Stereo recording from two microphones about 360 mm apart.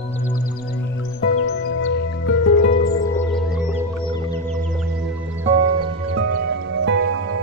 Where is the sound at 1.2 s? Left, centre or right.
Left.